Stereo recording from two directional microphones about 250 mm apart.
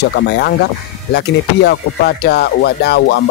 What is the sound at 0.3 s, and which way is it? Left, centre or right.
Speech, left.